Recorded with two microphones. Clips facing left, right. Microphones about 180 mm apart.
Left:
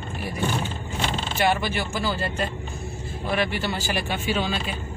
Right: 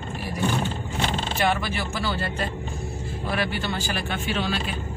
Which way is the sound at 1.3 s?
Centre (ahead or behind).